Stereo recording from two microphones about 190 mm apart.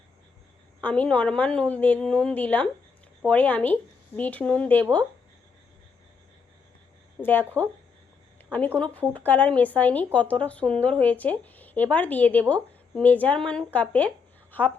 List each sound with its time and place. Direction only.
0.8 s speech: 10° left (ahead or behind)
7.2 s speech: 10° left (ahead or behind)
9.1 s speech: 10° left (ahead or behind)